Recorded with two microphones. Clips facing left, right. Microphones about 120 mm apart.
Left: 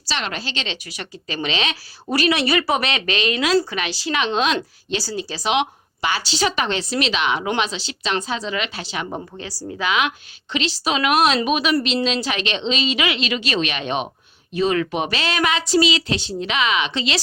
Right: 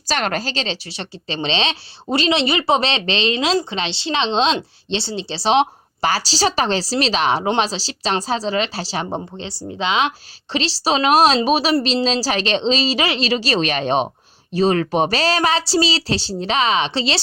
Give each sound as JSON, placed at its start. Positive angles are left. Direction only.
{"t": 0.1, "sound": "a woman's voice", "side_deg": -45}